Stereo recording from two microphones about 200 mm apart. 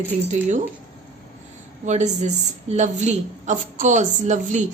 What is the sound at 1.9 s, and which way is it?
A woman's voice, 35° right (ahead or behind).